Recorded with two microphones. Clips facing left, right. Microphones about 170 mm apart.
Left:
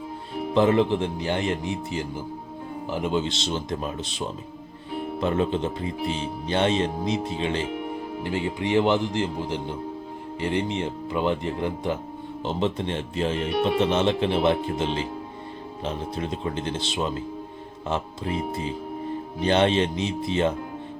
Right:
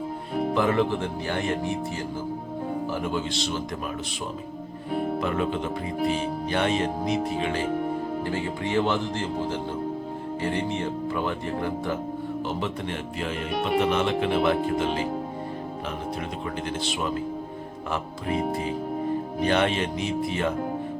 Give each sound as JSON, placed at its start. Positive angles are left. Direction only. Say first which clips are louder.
{"t": 0.5, "sound": "speech", "louder": "left 5 dB", "side_deg": 20}
{"t": 5.2, "sound": "speech", "louder": "left 2 dB", "side_deg": 30}
{"t": 16.1, "sound": "speech", "louder": "left 2 dB", "side_deg": 25}